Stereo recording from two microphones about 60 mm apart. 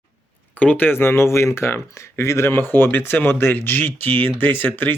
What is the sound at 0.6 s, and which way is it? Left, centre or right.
Speech, left.